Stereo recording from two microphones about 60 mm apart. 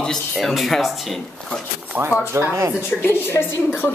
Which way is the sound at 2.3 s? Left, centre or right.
Right.